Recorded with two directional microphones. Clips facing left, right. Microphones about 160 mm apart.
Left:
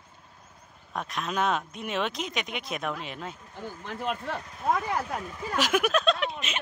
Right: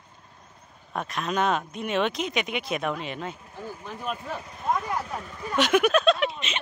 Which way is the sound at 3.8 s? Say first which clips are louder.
Left 2 dB; 75° left (ahead or behind).